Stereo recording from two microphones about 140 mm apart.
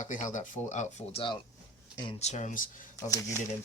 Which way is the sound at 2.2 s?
55° left (ahead or behind).